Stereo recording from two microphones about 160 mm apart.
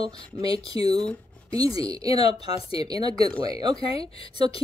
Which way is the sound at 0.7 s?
15° right (ahead or behind).